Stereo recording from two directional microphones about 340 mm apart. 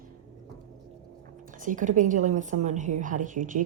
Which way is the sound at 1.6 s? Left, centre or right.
Right.